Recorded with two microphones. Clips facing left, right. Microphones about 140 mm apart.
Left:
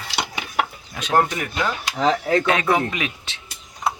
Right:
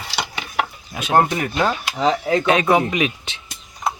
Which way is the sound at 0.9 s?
10° right (ahead or behind).